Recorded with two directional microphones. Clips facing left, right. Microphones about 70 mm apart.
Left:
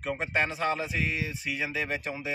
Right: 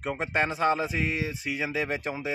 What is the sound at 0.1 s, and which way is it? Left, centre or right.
Speech, right.